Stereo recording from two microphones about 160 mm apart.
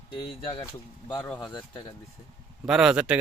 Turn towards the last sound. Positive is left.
turn(degrees=-5)  # may be behind; listen again after turning